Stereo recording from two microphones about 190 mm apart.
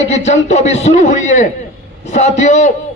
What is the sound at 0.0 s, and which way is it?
A man's voice, 35° left (ahead or behind).